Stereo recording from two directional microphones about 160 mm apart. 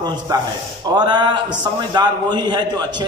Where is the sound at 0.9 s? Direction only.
25° right (ahead or behind).